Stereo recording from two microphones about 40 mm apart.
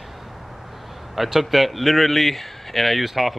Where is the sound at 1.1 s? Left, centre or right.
Centre.